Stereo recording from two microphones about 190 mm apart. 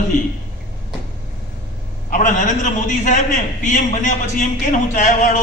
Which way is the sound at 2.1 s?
45° left (ahead or behind).